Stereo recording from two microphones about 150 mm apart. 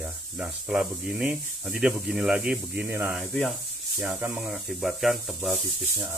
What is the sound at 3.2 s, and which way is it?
Speech, centre (ahead or behind).